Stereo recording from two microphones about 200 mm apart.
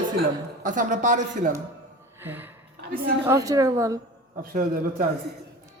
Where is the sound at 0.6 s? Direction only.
40° right (ahead or behind).